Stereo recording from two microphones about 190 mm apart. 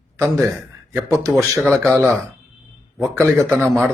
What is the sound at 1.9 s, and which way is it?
Speech, 10° right (ahead or behind).